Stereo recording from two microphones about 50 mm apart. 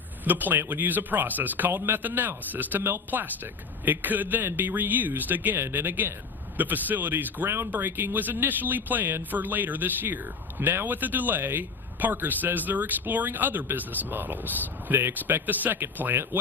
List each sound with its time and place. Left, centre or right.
0.3 s speech: right